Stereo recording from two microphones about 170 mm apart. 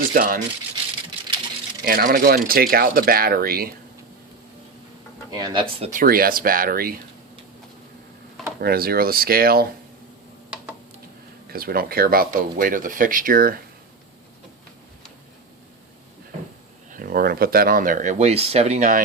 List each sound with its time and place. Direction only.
0.1 s speech: 55° right (ahead or behind)
1.8 s speech: 60° right (ahead or behind)
5.3 s speech: 25° right (ahead or behind)
5.8 s speech: 50° right (ahead or behind)
8.6 s speech: 65° right (ahead or behind)
11.4 s speech: 60° right (ahead or behind)
16.9 s speech: 55° right (ahead or behind)